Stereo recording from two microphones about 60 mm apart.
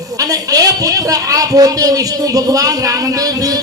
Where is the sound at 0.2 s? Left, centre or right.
Right.